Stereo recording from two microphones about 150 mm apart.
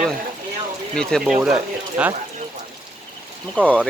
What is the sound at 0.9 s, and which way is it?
Speech, 5° left (ahead or behind).